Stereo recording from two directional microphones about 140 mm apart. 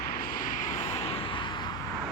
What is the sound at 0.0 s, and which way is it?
Vehicle, 90° left.